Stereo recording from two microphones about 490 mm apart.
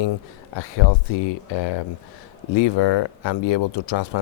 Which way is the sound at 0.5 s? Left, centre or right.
Left.